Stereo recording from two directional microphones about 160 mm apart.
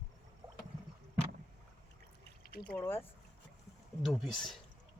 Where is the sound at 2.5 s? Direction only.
65° left (ahead or behind).